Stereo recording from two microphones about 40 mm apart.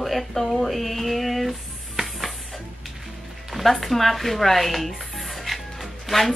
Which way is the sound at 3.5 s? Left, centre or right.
Centre.